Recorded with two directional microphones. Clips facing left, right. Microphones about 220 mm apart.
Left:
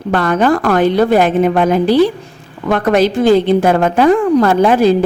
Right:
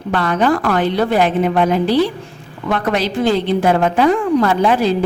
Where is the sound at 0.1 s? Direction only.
45° left (ahead or behind).